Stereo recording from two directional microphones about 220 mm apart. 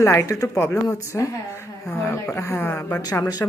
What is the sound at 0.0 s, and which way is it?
Speech, 15° left (ahead or behind).